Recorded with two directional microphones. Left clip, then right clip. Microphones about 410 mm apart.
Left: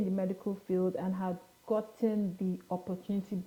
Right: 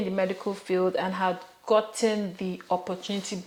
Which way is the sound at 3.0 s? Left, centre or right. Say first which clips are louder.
Right 7 dB; centre.